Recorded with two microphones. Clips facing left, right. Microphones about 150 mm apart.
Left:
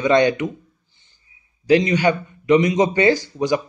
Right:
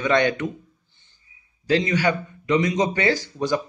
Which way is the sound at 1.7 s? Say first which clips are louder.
Left 5 dB; 20° left (ahead or behind).